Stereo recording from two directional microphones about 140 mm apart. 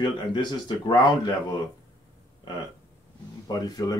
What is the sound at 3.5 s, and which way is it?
Speech, 25° left (ahead or behind).